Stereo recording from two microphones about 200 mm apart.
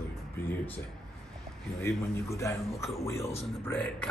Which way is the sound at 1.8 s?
15° left (ahead or behind).